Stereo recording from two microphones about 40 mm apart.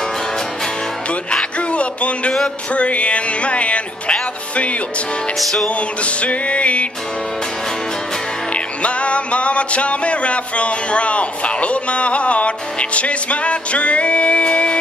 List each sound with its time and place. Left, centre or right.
1.6 s music: left
5.4 s music: centre
5.7 s music: left
8.8 s music: left